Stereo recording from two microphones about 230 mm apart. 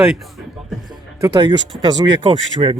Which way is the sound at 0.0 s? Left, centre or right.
Centre.